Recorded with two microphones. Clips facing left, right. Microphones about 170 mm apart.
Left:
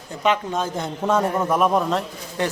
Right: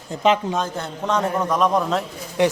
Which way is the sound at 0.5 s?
10° left (ahead or behind).